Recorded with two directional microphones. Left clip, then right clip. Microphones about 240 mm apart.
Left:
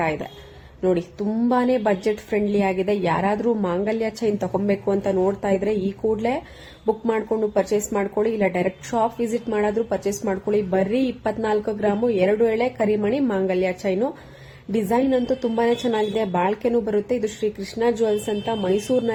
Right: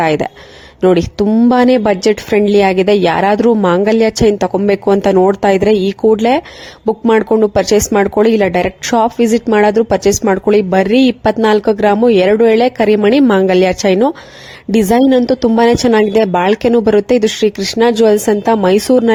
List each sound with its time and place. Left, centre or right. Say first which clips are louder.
0.0 s speech: right 11 dB; right